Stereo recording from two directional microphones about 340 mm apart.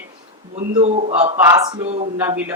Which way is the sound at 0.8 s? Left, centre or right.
Centre.